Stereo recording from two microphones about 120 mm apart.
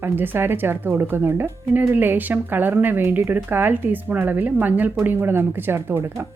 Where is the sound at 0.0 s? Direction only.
15° right (ahead or behind).